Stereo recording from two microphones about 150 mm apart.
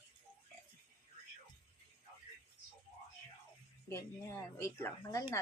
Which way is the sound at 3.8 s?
15° left (ahead or behind).